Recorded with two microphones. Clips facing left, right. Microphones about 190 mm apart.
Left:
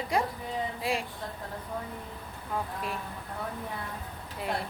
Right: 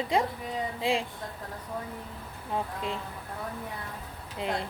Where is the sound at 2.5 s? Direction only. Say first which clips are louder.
Right 2 dB; 20° right (ahead or behind).